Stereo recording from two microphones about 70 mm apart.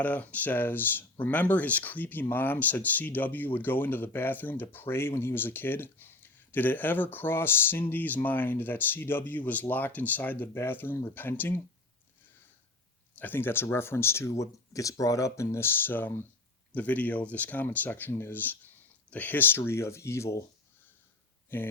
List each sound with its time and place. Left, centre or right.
0.0 s speech: left
13.1 s speech: left
21.5 s speech: left